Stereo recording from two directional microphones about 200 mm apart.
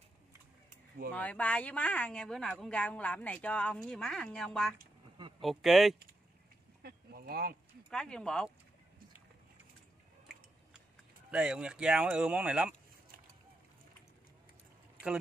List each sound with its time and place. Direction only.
1.1 s speech: 5° left (ahead or behind)
6.8 s a sound: 50° right (ahead or behind)
7.9 s speech: 5° left (ahead or behind)
11.2 s speech: 5° right (ahead or behind)